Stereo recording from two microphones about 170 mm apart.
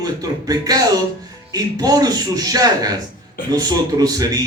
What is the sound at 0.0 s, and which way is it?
A man's voice, 20° right (ahead or behind).